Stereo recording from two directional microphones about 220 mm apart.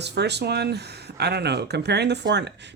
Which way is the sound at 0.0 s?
50° right (ahead or behind).